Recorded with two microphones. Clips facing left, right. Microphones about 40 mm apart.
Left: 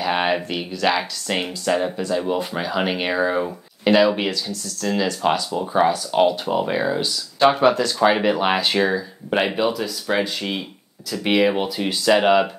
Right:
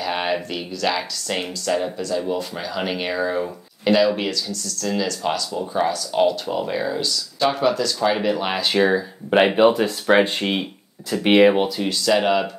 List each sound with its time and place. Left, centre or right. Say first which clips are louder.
0.0 s speech: left 3 dB; centre
9.3 s speech: right 4 dB; centre
9.6 s speech: right 6 dB; right
11.8 s speech: left 6 dB; centre